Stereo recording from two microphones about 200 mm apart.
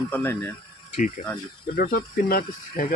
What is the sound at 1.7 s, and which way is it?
Speech, 50° left (ahead or behind).